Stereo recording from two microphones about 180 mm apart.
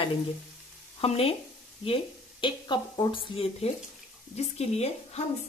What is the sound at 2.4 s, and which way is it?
A woman's voice, 25° left (ahead or behind).